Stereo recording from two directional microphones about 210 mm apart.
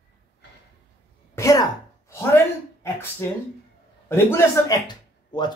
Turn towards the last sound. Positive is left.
turn(degrees=20)  # may be behind; listen again after turning